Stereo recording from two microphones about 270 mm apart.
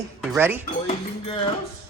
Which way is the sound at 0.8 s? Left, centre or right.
Centre.